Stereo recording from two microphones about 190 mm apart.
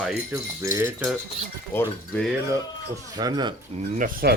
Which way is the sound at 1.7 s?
10° left (ahead or behind).